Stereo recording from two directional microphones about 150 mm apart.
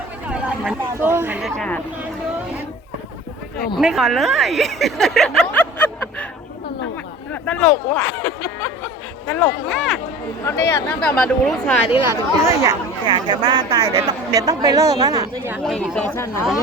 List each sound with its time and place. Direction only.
0.3 s speech: 10° right (ahead or behind)
1.4 s speech: 5° left (ahead or behind)
3.8 s speech: centre (ahead or behind)
5.5 s a sound: 10° left (ahead or behind)
7.4 s speech: 10° left (ahead or behind)
10.4 s speech: 20° left (ahead or behind)
11.0 s speech: 5° left (ahead or behind)
12.0 s speech: 20° right (ahead or behind)
13.1 s a woman's voice: 30° right (ahead or behind)
15.6 s speech: 5° left (ahead or behind)